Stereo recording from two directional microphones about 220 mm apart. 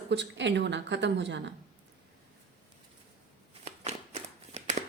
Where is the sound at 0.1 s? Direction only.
55° right (ahead or behind).